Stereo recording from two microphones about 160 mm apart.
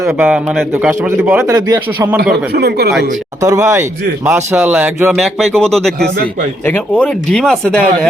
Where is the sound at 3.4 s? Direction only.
20° right (ahead or behind).